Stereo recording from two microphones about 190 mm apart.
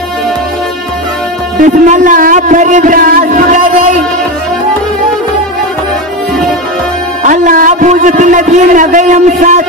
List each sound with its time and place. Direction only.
1.6 s a man's voice: 45° right (ahead or behind)
7.2 s a man's voice: 45° right (ahead or behind)